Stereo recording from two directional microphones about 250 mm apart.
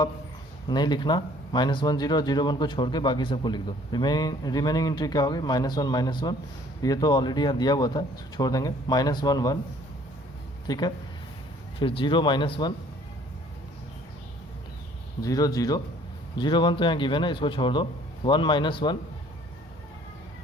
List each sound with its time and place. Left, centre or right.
0.7 s speech: centre
10.7 s a man's voice: centre
15.2 s a man's voice: centre